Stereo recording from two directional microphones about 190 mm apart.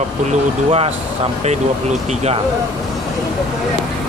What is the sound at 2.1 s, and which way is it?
Speech, 35° right (ahead or behind).